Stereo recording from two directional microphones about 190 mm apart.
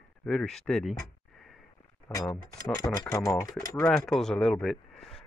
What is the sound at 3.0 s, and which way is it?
Speech, 15° left (ahead or behind).